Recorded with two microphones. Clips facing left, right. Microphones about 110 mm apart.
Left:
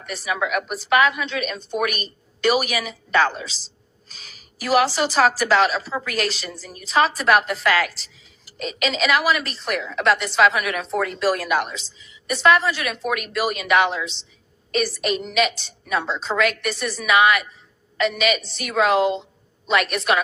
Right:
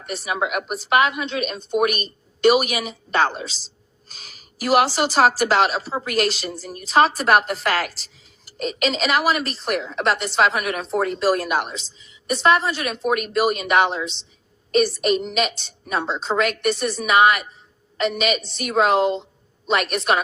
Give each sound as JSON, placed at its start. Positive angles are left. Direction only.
{"t": 0.2, "sound": "a woman's voice", "side_deg": -30}